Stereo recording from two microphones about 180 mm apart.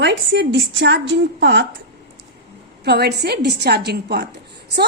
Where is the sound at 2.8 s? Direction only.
65° right (ahead or behind).